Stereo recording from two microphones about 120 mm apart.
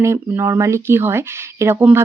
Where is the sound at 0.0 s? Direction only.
25° right (ahead or behind).